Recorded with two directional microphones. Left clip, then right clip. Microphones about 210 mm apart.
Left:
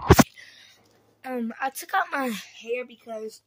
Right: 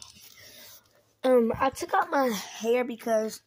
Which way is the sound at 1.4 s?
15° left (ahead or behind).